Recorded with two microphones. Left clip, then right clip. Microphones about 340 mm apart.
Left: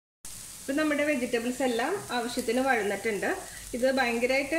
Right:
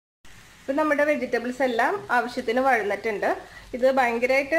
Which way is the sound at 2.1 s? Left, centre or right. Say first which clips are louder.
Right 6 dB; right.